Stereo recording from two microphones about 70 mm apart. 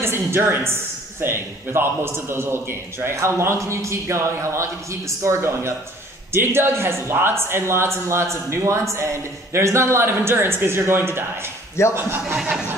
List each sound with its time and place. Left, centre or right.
0.0 s a woman's voice: right